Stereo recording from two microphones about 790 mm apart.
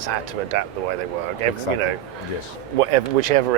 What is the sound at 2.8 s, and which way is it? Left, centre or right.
Speech, right.